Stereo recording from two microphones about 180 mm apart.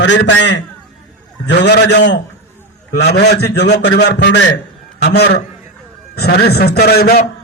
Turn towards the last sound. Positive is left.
turn(degrees=60)  # may be behind; listen again after turning